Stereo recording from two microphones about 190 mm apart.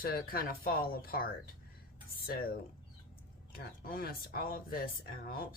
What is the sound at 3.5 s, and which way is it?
Speech, 50° left (ahead or behind).